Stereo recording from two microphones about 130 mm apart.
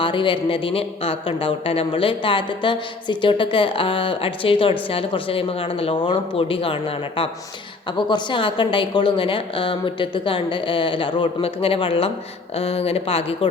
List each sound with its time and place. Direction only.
0.0 s a woman's voice: 40° left (ahead or behind)